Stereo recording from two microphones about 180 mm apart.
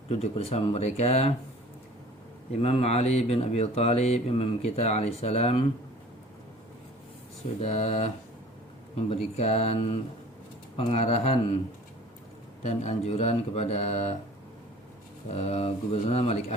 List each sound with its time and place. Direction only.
0.1 s speech: 35° left (ahead or behind)
2.5 s speech: 35° left (ahead or behind)
7.6 s speech: 35° left (ahead or behind)
12.6 s speech: 35° left (ahead or behind)
15.4 s speech: 35° left (ahead or behind)